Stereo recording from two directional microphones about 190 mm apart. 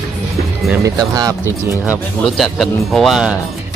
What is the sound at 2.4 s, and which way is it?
Speech, centre (ahead or behind).